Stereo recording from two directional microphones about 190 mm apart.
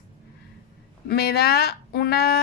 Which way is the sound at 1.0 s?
55° left (ahead or behind).